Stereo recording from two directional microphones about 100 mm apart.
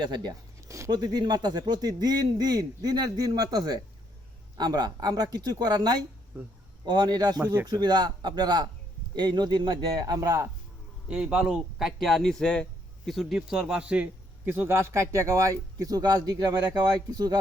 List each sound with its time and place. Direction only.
0.0 s a man's voice: 45° right (ahead or behind)
6.3 s speech: 20° right (ahead or behind)
6.8 s a man's voice: 45° right (ahead or behind); by 10.5 s 30° right (ahead or behind)
11.1 s a man's voice: 10° right (ahead or behind); by 17.3 s 40° right (ahead or behind)